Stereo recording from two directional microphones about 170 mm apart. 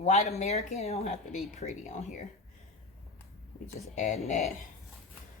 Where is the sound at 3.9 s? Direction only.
45° left (ahead or behind).